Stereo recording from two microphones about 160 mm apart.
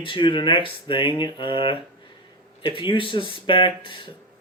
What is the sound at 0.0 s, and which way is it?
Speech, 30° left (ahead or behind).